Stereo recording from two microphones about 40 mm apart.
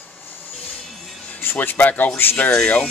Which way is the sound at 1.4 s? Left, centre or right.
Left.